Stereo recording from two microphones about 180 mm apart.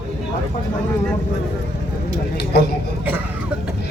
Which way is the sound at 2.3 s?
65° left (ahead or behind).